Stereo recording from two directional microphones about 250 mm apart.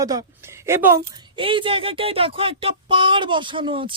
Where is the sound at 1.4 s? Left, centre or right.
Right.